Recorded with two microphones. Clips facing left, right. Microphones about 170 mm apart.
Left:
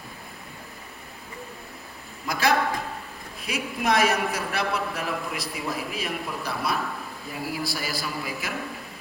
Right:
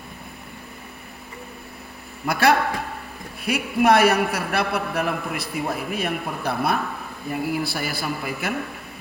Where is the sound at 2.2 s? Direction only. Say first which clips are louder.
Right 4 dB; 65° right (ahead or behind).